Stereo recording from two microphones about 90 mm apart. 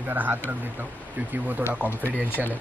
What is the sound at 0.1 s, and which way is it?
Speech, 20° right (ahead or behind).